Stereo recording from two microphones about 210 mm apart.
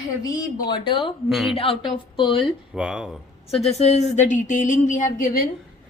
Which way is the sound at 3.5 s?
30° left (ahead or behind).